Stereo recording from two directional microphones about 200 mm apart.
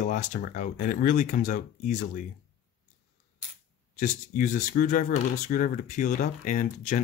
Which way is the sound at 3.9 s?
40° left (ahead or behind).